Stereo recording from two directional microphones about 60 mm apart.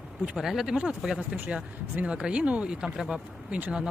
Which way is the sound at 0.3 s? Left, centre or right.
Centre.